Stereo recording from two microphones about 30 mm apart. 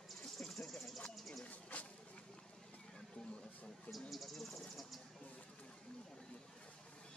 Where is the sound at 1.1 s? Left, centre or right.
Centre.